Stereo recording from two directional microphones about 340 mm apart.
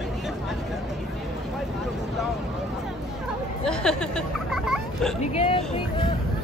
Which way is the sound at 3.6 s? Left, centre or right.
Centre.